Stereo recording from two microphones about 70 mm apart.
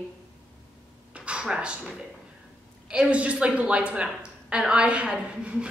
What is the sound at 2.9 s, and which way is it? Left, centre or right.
A woman's voice, centre.